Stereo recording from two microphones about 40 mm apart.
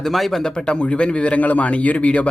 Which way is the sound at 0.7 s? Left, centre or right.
Left.